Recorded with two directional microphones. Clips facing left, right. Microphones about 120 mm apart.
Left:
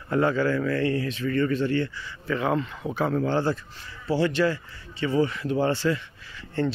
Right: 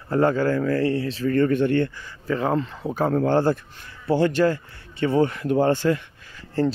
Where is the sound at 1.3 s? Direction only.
55° right (ahead or behind).